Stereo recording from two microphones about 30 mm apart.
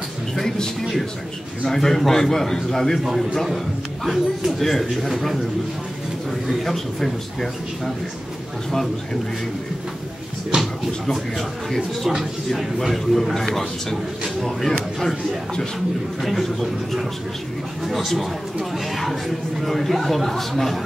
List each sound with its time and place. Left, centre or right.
1.6 s a man's voice: centre
3.4 s a man's voice: centre
4.5 s speech: centre
6.4 s speech: centre
10.5 s speech: right
12.8 s a man's voice: centre
16.2 s a man's voice: centre